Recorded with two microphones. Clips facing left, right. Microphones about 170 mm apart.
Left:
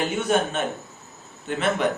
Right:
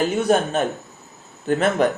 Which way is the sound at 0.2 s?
40° right (ahead or behind).